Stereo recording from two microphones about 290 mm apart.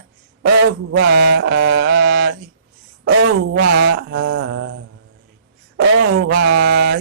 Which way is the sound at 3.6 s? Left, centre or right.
Right.